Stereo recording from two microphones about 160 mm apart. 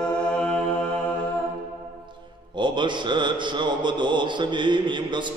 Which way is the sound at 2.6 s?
30° right (ahead or behind).